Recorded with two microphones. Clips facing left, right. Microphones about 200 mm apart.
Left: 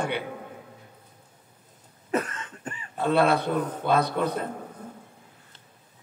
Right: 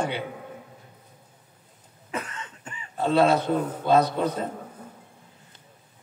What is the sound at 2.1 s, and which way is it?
Cough, 40° left (ahead or behind).